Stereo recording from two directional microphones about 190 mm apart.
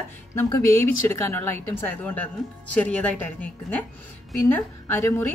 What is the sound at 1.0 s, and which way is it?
Speech, 10° left (ahead or behind).